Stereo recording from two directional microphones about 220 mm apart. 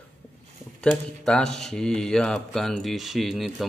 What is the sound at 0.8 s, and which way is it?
Speech, 5° left (ahead or behind).